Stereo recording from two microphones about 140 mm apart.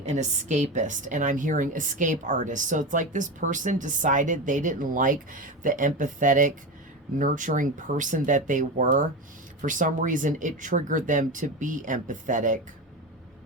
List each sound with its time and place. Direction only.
0.0 s a woman's voice: 55° right (ahead or behind)